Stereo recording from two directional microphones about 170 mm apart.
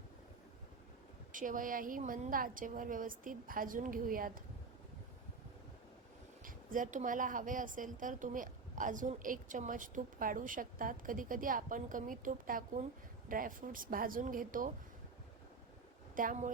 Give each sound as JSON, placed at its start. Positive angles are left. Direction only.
{"t": 1.3, "sound": "speech", "side_deg": -50}
{"t": 6.4, "sound": "speech", "side_deg": -50}
{"t": 16.1, "sound": "speech", "side_deg": -50}